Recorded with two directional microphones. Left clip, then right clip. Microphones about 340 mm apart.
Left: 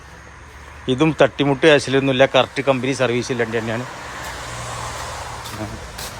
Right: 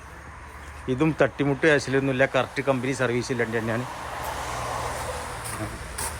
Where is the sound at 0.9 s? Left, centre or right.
Centre.